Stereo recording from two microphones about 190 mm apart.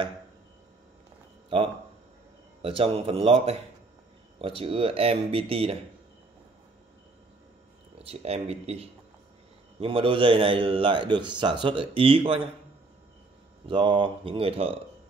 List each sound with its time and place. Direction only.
1.5 s a man's voice: 25° right (ahead or behind)
8.0 s a man's voice: 30° right (ahead or behind)
13.7 s a man's voice: 25° right (ahead or behind)